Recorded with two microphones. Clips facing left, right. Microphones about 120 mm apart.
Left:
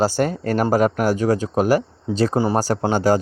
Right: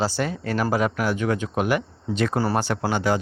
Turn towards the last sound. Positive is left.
turn(degrees=40)  # may be behind; listen again after turning